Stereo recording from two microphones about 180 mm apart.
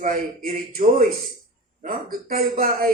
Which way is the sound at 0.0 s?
50° right (ahead or behind).